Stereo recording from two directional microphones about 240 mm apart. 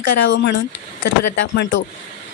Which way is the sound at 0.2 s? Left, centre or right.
Left.